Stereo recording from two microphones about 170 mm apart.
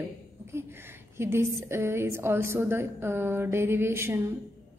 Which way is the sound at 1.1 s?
15° right (ahead or behind).